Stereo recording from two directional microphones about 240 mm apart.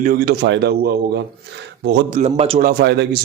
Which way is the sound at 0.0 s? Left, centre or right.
Right.